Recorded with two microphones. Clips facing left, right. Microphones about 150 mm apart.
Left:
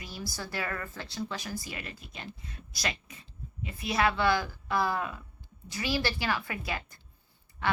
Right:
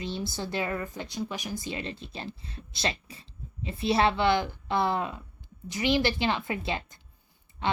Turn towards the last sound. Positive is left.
turn(degrees=-20)  # may be behind; listen again after turning